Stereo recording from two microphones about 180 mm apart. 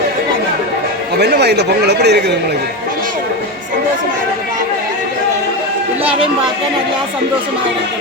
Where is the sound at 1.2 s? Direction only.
70° right (ahead or behind).